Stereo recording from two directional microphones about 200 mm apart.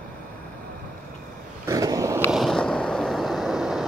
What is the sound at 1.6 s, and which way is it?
Skateboard, 15° right (ahead or behind).